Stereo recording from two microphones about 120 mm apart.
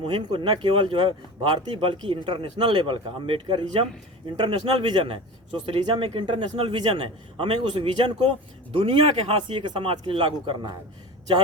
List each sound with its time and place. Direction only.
0.0 s speech: 45° right (ahead or behind)